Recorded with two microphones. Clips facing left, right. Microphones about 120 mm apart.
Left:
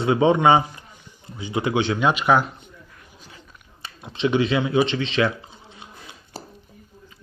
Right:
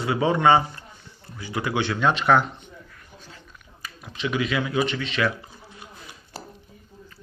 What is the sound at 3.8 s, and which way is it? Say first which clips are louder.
Speech: left 7 dB; 30° left (ahead or behind).